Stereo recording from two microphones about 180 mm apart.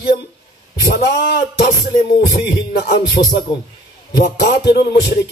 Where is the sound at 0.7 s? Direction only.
60° left (ahead or behind).